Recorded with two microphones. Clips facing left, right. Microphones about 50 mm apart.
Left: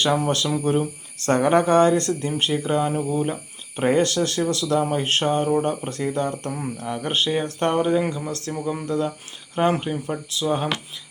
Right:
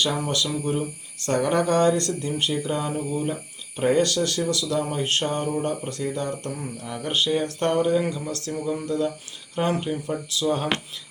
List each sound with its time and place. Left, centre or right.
0.0 s speech: left